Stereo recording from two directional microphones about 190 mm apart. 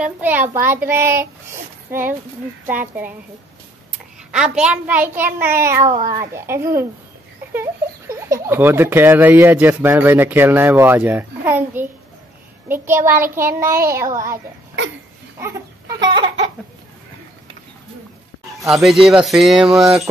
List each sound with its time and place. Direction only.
0.0 s speech: 10° right (ahead or behind)
4.3 s speech: 5° right (ahead or behind)
5.9 s a child's voice: 35° right (ahead or behind)
6.1 s speech: 15° right (ahead or behind)
15.3 s a sound: 15° right (ahead or behind)
18.7 s speech: centre (ahead or behind)